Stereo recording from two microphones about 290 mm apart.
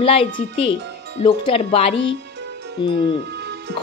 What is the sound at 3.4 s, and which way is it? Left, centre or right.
Music, right.